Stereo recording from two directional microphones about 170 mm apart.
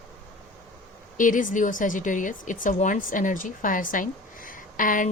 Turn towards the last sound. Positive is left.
turn(degrees=50)  # may be behind; listen again after turning